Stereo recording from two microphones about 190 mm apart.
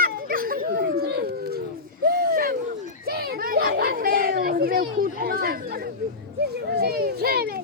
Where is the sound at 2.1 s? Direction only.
55° right (ahead or behind).